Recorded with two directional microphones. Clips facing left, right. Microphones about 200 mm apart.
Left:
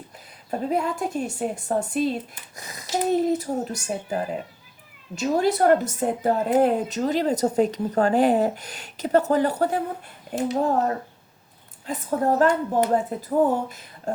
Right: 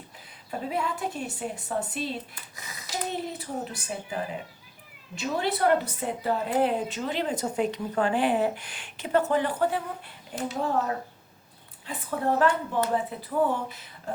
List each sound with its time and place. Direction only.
0.7 s a woman's voice: 40° left (ahead or behind)